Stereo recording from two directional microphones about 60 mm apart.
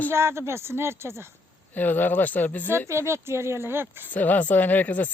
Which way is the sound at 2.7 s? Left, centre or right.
Right.